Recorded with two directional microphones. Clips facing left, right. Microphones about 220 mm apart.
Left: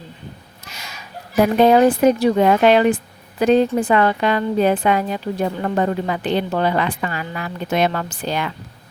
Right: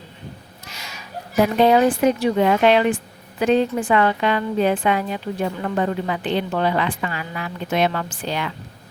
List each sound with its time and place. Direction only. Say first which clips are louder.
1.6 s a woman's voice: left 3 dB; 40° left (ahead or behind)